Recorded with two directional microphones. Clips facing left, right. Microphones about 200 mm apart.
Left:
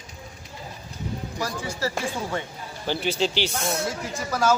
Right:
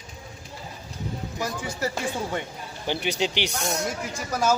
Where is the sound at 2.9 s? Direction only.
15° right (ahead or behind).